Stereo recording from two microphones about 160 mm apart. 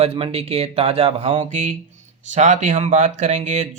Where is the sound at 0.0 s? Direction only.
40° right (ahead or behind).